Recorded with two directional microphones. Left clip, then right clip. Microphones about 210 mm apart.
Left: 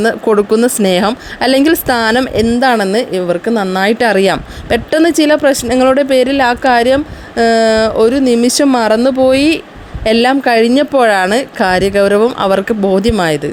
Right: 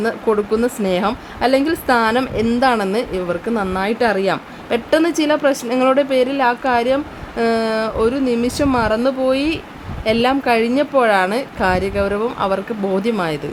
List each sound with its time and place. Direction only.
0.0 s a woman's voice: 30° left (ahead or behind)